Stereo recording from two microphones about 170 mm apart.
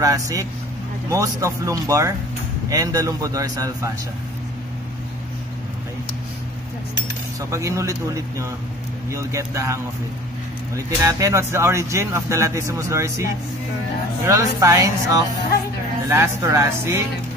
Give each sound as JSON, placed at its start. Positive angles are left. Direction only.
{"t": 0.0, "sound": "a man's voice", "side_deg": -20}
{"t": 7.5, "sound": "speech", "side_deg": -20}
{"t": 11.0, "sound": "a man's voice", "side_deg": -20}